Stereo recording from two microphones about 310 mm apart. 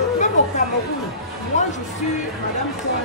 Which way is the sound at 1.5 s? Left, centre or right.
Left.